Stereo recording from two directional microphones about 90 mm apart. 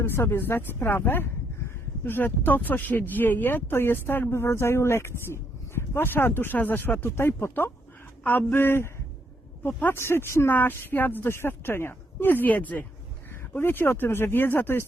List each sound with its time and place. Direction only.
0.0 s speech: 25° left (ahead or behind)